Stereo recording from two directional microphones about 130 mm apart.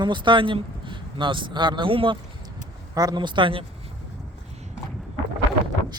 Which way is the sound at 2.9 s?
30° right (ahead or behind).